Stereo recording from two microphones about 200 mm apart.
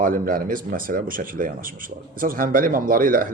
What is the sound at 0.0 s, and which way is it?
Speech, 45° right (ahead or behind).